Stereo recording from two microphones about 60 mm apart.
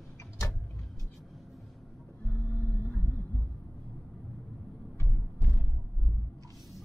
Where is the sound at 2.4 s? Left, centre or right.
Left.